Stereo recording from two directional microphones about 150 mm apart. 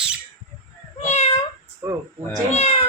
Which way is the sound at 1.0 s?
45° left (ahead or behind).